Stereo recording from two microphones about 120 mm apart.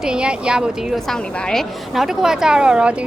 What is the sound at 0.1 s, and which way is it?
A woman's voice, 5° right (ahead or behind).